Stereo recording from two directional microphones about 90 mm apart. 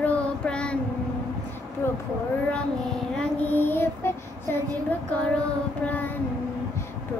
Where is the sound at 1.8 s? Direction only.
30° left (ahead or behind).